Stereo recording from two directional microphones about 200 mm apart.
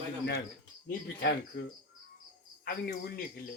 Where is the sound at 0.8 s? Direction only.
55° left (ahead or behind).